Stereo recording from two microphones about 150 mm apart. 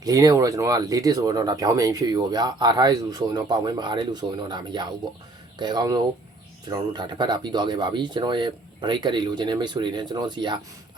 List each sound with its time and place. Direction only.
0.0 s speech: 25° right (ahead or behind)